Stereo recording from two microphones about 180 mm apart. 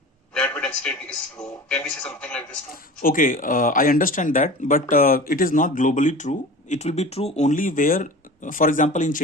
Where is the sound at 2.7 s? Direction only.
55° left (ahead or behind).